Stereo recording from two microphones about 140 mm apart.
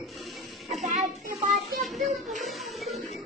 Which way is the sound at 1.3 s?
Centre (ahead or behind).